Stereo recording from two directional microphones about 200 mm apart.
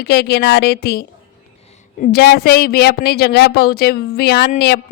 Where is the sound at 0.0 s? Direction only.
55° left (ahead or behind).